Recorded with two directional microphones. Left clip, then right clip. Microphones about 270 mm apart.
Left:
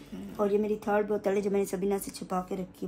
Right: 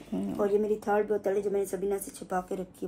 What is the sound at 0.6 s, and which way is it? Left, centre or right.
Speech, left.